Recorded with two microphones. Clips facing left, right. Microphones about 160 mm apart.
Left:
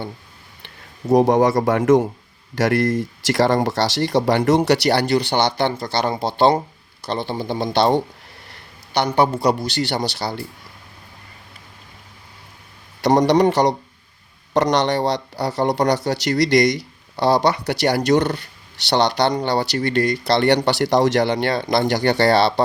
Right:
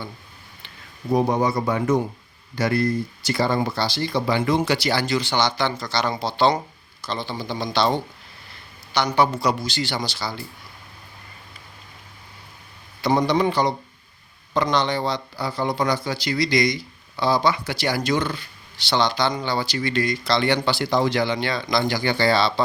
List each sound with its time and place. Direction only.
1.1 s speech: 90° left
2.6 s speech: 90° left; by 8.0 s 60° left (ahead or behind)
9.4 s speech: 60° left (ahead or behind)
13.0 s speech: 75° left (ahead or behind); by 20.6 s 60° left (ahead or behind)
20.8 s speech: 75° left (ahead or behind)